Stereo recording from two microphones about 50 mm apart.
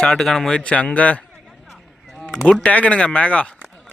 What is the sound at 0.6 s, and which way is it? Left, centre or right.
Speech, left.